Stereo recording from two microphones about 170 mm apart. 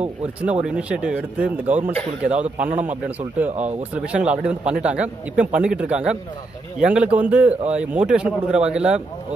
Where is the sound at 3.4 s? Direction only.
45° right (ahead or behind).